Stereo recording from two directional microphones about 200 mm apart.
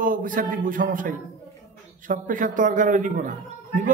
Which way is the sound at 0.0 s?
45° right (ahead or behind).